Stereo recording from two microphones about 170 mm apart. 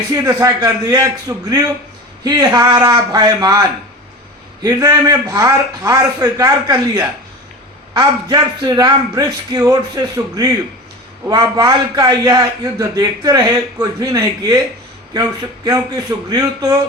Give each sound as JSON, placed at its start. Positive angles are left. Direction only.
{"t": 0.1, "sound": "a man's voice", "side_deg": -20}